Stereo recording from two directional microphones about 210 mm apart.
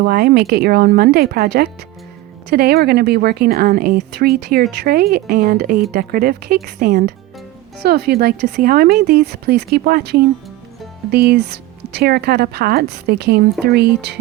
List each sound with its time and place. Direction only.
0.0 s speech: 50° right (ahead or behind)